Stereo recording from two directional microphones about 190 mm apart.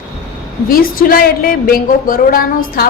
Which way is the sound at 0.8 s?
50° left (ahead or behind).